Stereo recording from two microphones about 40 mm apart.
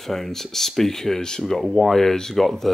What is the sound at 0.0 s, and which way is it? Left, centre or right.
Speech, centre.